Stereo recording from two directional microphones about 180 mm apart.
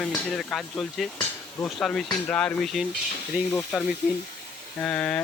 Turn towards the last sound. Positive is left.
turn(degrees=5)  # may be behind; listen again after turning